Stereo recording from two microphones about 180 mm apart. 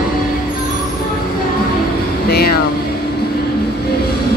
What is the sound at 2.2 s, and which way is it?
Speech, 60° left (ahead or behind).